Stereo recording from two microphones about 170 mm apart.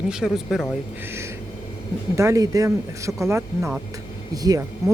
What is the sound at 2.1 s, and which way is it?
A woman's voice, 20° right (ahead or behind).